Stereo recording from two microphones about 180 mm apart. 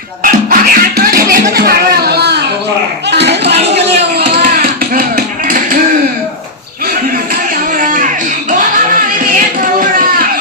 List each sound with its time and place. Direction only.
0.2 s speech: 50° right (ahead or behind); by 2.4 s 65° right (ahead or behind)
3.1 s music: 70° right (ahead or behind)
4.2 s music: 55° right (ahead or behind)
7.8 s a sound: 45° right (ahead or behind)